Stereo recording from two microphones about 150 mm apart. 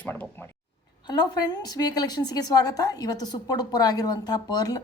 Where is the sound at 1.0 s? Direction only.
25° left (ahead or behind).